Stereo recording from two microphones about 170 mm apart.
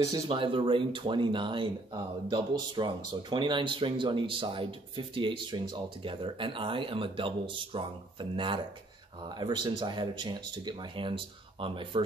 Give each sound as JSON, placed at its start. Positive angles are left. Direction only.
{"t": 0.0, "sound": "speech", "side_deg": -25}